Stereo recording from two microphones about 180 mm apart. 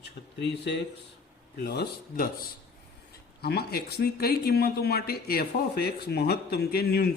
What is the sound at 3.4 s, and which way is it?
Speech, 60° left (ahead or behind).